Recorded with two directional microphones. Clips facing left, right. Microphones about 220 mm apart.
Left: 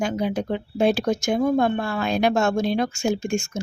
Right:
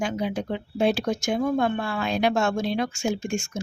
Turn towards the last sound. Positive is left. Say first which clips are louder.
# left 3 dB
turn(degrees=40)  # may be behind; listen again after turning